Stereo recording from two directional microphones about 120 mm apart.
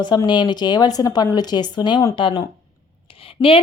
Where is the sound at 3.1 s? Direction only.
50° left (ahead or behind).